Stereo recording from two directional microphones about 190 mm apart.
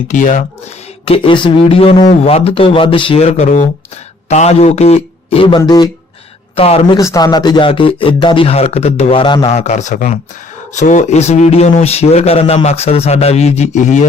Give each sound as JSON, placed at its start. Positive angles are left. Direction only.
{"t": 0.1, "sound": "a man's voice", "side_deg": 40}
{"t": 1.0, "sound": "a man's voice", "side_deg": 30}
{"t": 6.9, "sound": "a man's voice", "side_deg": 20}